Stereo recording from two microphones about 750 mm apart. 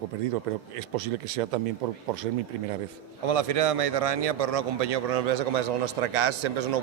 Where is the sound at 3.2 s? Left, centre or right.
Right.